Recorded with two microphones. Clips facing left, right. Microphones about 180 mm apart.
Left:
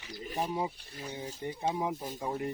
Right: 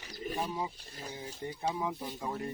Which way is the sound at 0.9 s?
40° right (ahead or behind).